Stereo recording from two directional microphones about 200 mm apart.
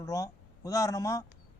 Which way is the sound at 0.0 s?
15° left (ahead or behind).